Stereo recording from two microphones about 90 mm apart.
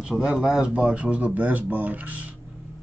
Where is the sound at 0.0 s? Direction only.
10° right (ahead or behind).